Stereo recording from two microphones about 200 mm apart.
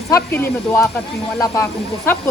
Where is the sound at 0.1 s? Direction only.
10° left (ahead or behind).